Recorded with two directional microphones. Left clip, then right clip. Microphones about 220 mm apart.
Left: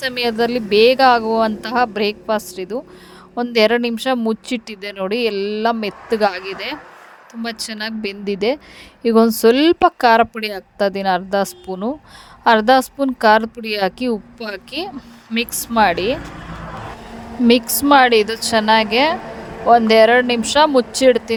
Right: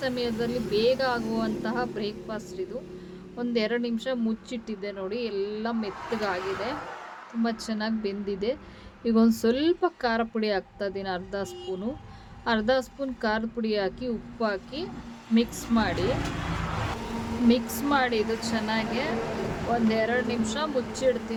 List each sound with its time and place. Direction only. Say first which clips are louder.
0.0 s speech: left 10 dB; 45° left (ahead or behind)
17.5 s speech: left 14 dB; 45° left (ahead or behind)